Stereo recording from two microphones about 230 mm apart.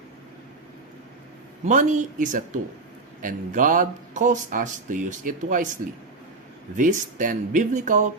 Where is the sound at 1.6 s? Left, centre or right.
Right.